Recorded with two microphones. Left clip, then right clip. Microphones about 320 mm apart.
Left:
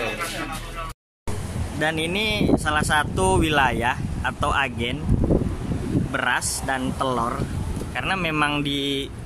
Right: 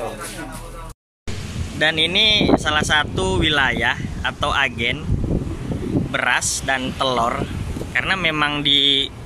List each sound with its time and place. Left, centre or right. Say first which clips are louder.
1.8 s speech: right 7 dB; centre
6.1 s speech: right 4 dB; centre